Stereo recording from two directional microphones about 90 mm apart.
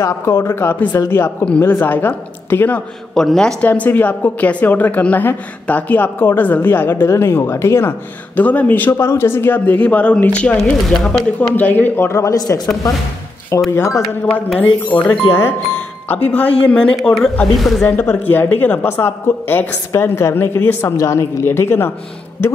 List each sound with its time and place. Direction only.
0.2 s a woman's voice: 30° left (ahead or behind)
3.2 s speech: 5° left (ahead or behind)
3.6 s a woman's voice: 20° left (ahead or behind)
8.4 s speech: 15° left (ahead or behind)
8.9 s speech: 30° left (ahead or behind)
10.6 s speech: 5° left (ahead or behind)
11.3 s a woman's voice: 20° left (ahead or behind)
12.4 s a man's voice: 45° left (ahead or behind)
13.7 s a man's voice: 30° left (ahead or behind)
14.6 s speech: 15° left (ahead or behind); by 17.8 s centre (ahead or behind)
17.8 s a woman's voice: 20° left (ahead or behind)